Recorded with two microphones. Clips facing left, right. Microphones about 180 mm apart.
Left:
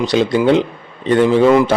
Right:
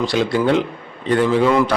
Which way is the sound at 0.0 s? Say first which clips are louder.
Left 4 dB; 20° left (ahead or behind).